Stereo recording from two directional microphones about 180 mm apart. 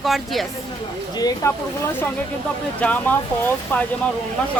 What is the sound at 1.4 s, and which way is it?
Speech, 15° left (ahead or behind).